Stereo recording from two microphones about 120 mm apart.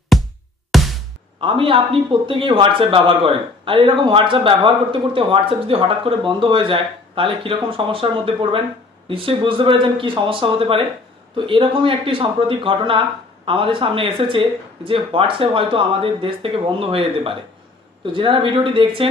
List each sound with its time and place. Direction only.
0.7 s music: centre (ahead or behind)
1.4 s speech: 45° right (ahead or behind)